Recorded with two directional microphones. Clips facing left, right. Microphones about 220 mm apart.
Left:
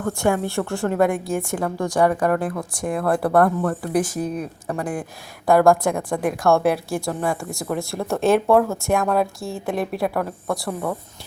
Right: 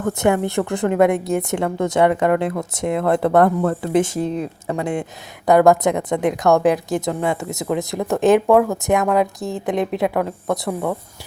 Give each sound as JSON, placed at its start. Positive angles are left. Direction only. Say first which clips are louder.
{"t": 0.0, "sound": "a woman's voice", "louder": "right 3 dB", "side_deg": -20}